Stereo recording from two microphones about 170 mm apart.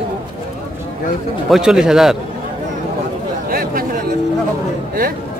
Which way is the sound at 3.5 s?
60° right (ahead or behind).